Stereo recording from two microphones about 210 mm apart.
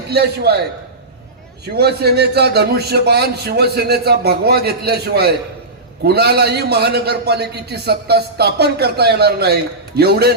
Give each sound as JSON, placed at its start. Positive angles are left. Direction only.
{"t": 0.1, "sound": "a man's voice", "side_deg": -50}
{"t": 1.6, "sound": "a man's voice", "side_deg": -50}